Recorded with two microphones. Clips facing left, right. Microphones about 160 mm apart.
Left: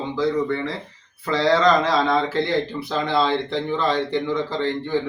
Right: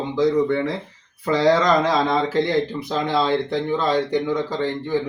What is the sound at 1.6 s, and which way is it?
Speech, 15° right (ahead or behind).